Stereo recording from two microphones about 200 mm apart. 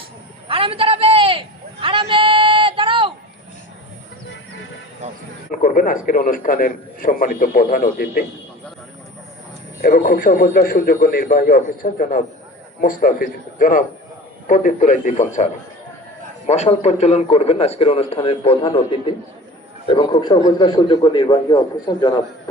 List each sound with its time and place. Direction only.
0.4 s a sound: 25° right (ahead or behind)
5.5 s a man's voice: 40° left (ahead or behind)
9.8 s a man's voice: 50° left (ahead or behind)
16.5 s a man's voice: 35° left (ahead or behind)